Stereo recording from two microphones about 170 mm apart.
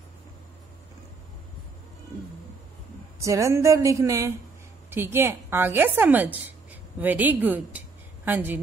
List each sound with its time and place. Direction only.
3.2 s a woman's voice: 20° right (ahead or behind)